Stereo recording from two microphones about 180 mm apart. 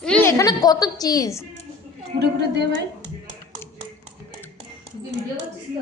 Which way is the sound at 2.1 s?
65° right (ahead or behind).